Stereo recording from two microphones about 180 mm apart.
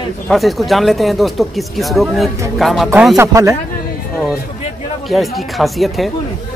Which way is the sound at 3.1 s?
15° right (ahead or behind).